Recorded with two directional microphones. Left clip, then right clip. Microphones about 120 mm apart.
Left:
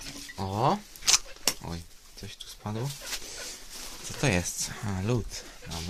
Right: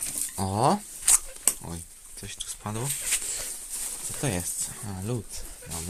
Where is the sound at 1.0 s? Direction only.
Centre (ahead or behind).